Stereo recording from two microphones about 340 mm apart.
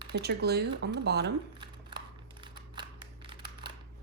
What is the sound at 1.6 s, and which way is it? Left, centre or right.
Scissors, centre.